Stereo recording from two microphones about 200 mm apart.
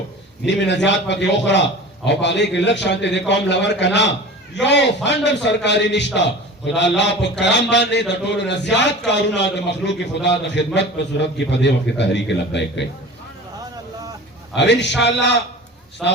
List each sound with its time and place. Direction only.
0.4 s a man's voice: 60° left (ahead or behind)
14.5 s a man's voice: 60° left (ahead or behind)